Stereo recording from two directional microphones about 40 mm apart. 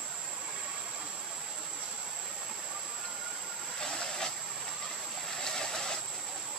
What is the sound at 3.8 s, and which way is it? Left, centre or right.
Vehicle, centre.